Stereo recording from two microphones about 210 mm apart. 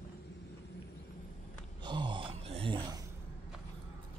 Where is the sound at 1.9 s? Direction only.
20° right (ahead or behind).